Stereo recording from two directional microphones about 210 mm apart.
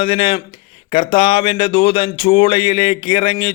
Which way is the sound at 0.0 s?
25° left (ahead or behind).